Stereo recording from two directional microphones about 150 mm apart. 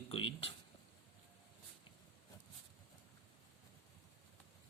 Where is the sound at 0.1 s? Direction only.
35° left (ahead or behind).